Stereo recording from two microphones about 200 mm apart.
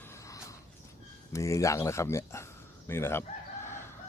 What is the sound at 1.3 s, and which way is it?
Speech, 15° left (ahead or behind).